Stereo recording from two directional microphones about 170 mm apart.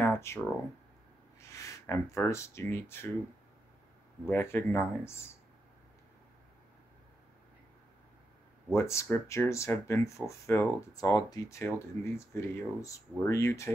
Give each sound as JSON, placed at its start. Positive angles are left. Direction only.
{"t": 0.0, "sound": "a sound", "side_deg": 15}
{"t": 1.5, "sound": "speech", "side_deg": 20}
{"t": 4.3, "sound": "speech", "side_deg": 15}
{"t": 8.7, "sound": "speech", "side_deg": 15}